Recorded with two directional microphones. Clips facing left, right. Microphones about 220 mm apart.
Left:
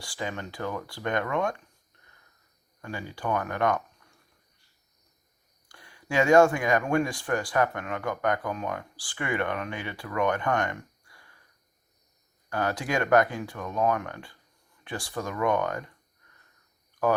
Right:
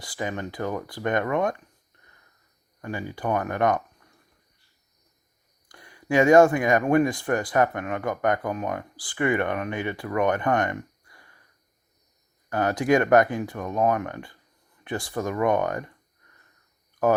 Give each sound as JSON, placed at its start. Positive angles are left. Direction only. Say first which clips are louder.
{"t": 0.0, "sound": "speech", "louder": "right 4 dB", "side_deg": -20}
{"t": 2.8, "sound": "speech", "louder": "right 4 dB", "side_deg": -20}
{"t": 5.6, "sound": "speech", "louder": "right 7 dB", "side_deg": -20}
{"t": 12.5, "sound": "speech", "louder": "right 7 dB", "side_deg": -20}